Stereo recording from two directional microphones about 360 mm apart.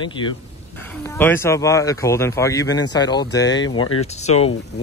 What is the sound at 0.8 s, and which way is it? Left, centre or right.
Speech, centre.